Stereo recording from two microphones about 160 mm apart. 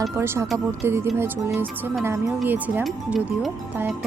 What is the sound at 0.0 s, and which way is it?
Speech, 15° right (ahead or behind).